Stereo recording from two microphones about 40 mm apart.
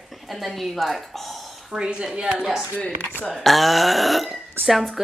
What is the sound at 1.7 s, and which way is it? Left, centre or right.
Speech, right.